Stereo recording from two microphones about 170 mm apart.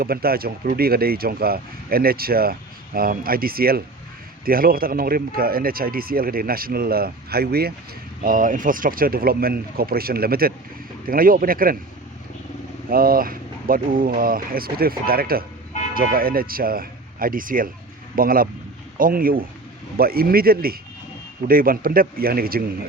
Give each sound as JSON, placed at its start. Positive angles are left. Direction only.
{"t": 0.0, "sound": "speech", "side_deg": -65}
{"t": 8.2, "sound": "speech", "side_deg": -55}
{"t": 12.9, "sound": "speech", "side_deg": -60}